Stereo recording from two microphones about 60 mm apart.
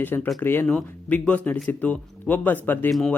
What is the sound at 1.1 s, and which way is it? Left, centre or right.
Speech, left.